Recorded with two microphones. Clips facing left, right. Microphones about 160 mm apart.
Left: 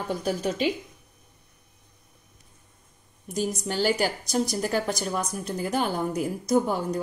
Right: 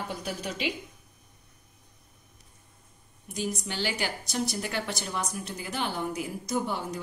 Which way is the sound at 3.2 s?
45° left (ahead or behind).